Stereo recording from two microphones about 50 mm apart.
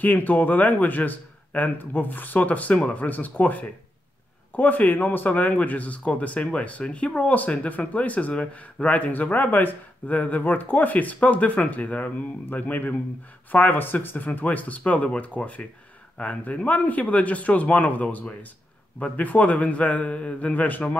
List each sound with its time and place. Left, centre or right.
0.0 s a man's voice: left